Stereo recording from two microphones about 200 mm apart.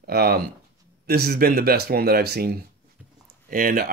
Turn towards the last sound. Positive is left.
turn(degrees=-45)  # may be behind; listen again after turning